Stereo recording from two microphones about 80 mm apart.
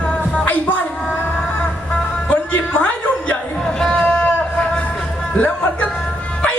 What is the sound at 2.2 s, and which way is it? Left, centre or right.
Music, left.